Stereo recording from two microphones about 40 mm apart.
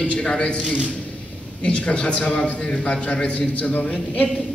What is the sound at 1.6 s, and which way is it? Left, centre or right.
A man's voice, left.